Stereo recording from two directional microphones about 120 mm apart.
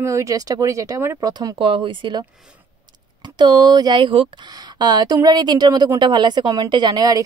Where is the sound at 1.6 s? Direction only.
45° right (ahead or behind).